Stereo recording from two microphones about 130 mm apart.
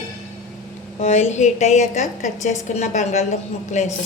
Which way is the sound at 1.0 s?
60° left (ahead or behind).